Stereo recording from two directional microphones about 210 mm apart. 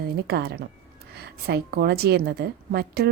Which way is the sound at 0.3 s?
50° right (ahead or behind).